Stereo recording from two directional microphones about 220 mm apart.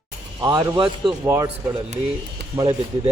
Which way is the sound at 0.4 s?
10° right (ahead or behind).